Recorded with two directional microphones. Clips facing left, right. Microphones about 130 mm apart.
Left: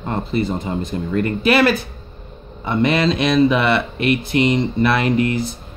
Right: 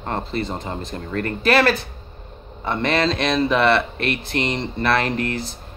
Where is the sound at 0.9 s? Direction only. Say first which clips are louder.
Left 5 dB; 20° left (ahead or behind).